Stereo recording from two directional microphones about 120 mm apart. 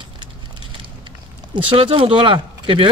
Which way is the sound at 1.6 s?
45° right (ahead or behind).